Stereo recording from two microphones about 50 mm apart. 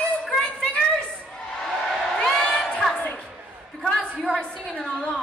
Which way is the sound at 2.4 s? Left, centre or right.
Left.